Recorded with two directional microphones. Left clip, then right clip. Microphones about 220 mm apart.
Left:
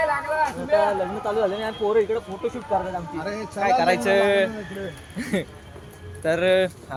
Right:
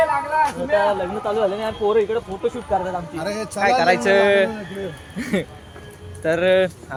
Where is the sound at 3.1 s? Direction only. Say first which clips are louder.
Right 4 dB; 55° right (ahead or behind).